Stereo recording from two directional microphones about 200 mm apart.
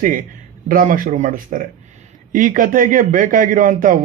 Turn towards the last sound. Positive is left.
turn(degrees=-45)  # may be behind; listen again after turning